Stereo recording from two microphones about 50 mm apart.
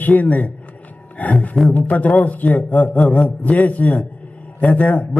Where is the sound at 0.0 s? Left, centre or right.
Left.